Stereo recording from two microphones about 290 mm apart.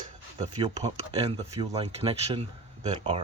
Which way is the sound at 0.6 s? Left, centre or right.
Centre.